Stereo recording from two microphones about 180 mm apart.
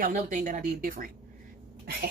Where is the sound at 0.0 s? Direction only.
45° right (ahead or behind).